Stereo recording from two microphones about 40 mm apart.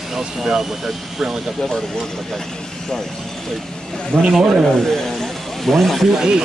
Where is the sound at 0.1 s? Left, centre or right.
Centre.